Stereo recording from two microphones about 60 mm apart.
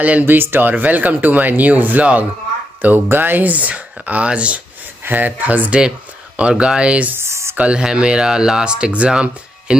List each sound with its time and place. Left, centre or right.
0.2 s speech: right
5.8 s a sound: centre
6.5 s speech: centre
7.2 s speech: right
7.5 s speech: centre